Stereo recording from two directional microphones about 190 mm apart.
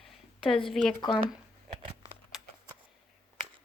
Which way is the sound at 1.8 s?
30° right (ahead or behind).